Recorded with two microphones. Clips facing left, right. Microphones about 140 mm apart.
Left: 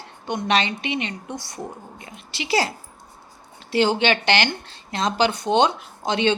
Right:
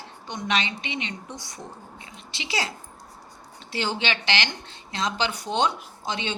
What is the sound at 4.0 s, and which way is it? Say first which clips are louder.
A woman's voice: left 7 dB; 55° left (ahead or behind).